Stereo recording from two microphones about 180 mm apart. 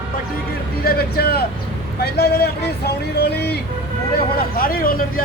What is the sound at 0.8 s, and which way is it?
Speech, 60° left (ahead or behind).